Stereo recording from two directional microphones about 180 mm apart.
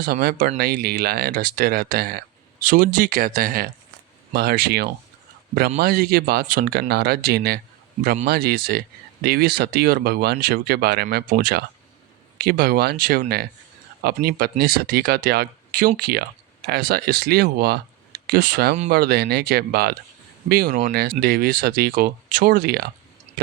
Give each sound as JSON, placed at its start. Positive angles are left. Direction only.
{"t": 0.0, "sound": "speech", "side_deg": -55}